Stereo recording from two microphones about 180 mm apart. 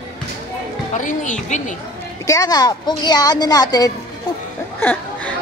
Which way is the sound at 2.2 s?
20° left (ahead or behind).